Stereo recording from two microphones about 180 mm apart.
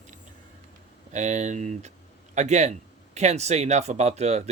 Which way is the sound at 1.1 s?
40° right (ahead or behind).